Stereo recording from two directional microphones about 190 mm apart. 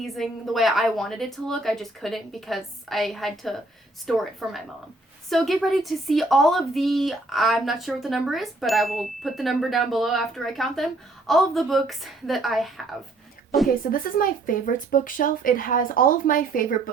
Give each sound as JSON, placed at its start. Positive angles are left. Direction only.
{"t": 0.0, "sound": "speech", "side_deg": 0}
{"t": 13.9, "sound": "speech", "side_deg": 45}